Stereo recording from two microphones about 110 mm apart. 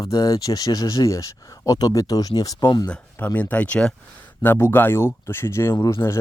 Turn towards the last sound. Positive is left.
turn(degrees=20)  # may be behind; listen again after turning